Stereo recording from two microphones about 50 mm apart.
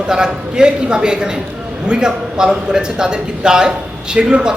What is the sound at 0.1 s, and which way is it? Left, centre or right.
Speech, centre.